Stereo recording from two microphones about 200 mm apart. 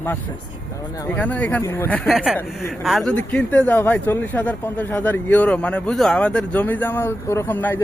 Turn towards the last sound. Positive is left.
turn(degrees=10)  # may be behind; listen again after turning